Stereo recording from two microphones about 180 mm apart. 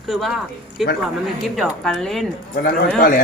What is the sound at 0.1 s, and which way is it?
Speech, centre (ahead or behind).